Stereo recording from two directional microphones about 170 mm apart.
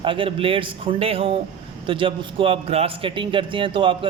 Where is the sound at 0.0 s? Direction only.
30° right (ahead or behind).